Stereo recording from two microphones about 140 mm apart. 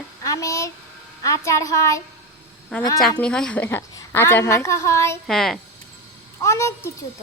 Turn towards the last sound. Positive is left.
turn(degrees=20)  # may be behind; listen again after turning